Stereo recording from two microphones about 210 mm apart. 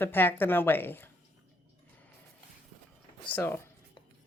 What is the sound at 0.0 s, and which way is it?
A woman's voice, 10° left (ahead or behind).